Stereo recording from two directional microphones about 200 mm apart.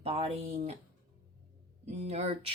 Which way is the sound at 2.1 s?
30° right (ahead or behind).